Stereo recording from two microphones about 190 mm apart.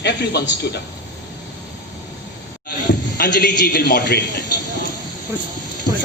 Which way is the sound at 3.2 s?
55° left (ahead or behind).